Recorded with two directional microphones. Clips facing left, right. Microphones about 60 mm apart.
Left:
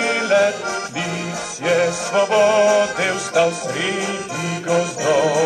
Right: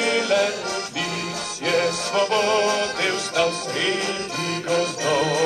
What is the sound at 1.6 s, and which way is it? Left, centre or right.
Music, centre.